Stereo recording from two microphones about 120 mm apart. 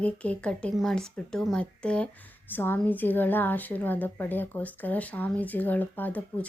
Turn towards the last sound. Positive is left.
turn(degrees=15)  # may be behind; listen again after turning